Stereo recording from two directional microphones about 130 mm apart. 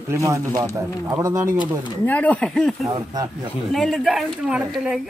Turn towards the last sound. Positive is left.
turn(degrees=-5)  # may be behind; listen again after turning